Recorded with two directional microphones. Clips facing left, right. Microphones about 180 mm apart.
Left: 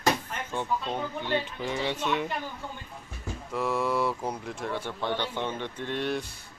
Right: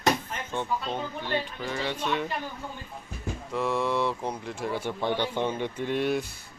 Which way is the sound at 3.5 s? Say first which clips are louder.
Right 1 dB; centre (ahead or behind).